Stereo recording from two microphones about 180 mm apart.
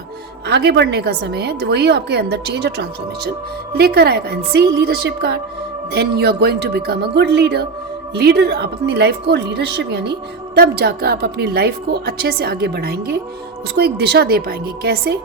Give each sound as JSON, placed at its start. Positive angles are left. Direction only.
{"t": 0.4, "sound": "a woman's voice", "side_deg": -70}
{"t": 3.8, "sound": "a woman's voice", "side_deg": -60}